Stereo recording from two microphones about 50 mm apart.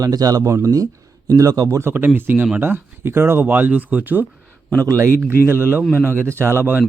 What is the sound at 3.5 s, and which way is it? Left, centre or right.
Speech, right.